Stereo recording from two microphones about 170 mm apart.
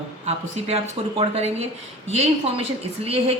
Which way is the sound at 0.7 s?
35° right (ahead or behind).